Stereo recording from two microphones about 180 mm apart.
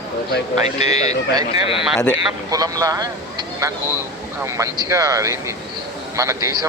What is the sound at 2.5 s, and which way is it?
A man's voice, 20° right (ahead or behind).